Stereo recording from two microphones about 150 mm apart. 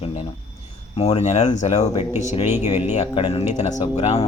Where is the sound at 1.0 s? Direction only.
45° left (ahead or behind).